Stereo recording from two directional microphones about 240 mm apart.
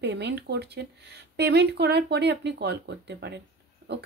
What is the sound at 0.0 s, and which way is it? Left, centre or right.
Speech, right.